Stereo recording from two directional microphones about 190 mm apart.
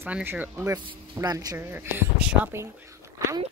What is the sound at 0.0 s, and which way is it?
A child's voice, 10° right (ahead or behind).